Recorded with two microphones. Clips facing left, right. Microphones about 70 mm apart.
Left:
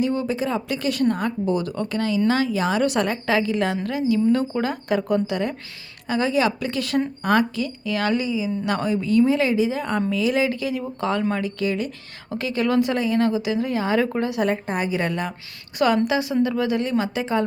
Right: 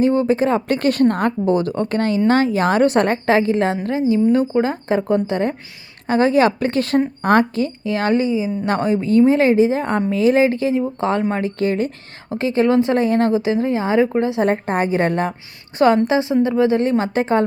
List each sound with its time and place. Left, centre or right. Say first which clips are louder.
0.0 s a woman's voice: right 7 dB; right
14.4 s a woman's voice: right 5 dB; right
16.0 s a woman's voice: right 4 dB; right